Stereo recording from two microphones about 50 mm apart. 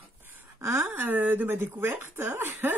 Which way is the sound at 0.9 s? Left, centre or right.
Right.